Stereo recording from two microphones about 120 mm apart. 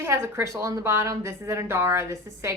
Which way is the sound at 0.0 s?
20° right (ahead or behind).